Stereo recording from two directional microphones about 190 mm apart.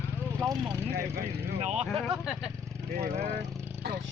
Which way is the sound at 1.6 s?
35° right (ahead or behind).